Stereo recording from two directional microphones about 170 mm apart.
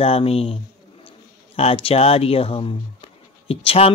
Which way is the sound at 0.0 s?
35° left (ahead or behind).